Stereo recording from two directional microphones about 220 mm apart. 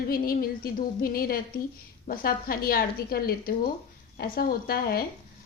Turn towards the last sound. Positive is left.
turn(degrees=45)  # may be behind; listen again after turning